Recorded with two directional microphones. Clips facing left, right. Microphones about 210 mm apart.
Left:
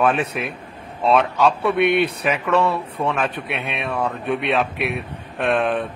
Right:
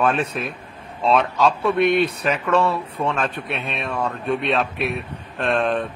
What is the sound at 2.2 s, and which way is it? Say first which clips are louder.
A man's voice: even; 10° left (ahead or behind).